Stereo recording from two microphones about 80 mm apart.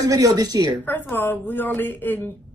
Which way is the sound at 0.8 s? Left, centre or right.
Left.